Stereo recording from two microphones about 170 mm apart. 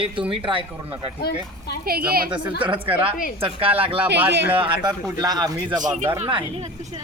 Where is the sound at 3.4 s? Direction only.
35° right (ahead or behind).